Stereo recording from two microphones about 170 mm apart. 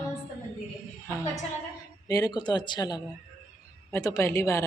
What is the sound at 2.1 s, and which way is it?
Speech, 20° left (ahead or behind).